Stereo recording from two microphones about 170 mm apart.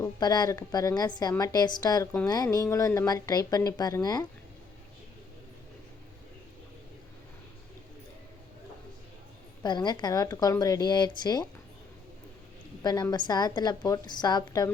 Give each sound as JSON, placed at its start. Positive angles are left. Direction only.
{"t": 0.0, "sound": "a woman's voice", "side_deg": 25}
{"t": 9.6, "sound": "a woman's voice", "side_deg": 25}
{"t": 12.8, "sound": "a woman's voice", "side_deg": 25}